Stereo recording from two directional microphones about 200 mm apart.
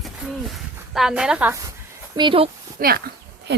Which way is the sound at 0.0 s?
Centre (ahead or behind).